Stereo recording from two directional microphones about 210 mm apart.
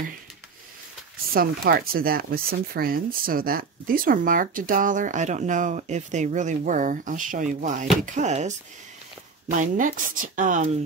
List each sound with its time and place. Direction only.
1.3 s speech: 45° right (ahead or behind)
9.6 s speech: 40° right (ahead or behind)